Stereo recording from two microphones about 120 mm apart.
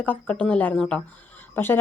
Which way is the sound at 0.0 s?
15° left (ahead or behind).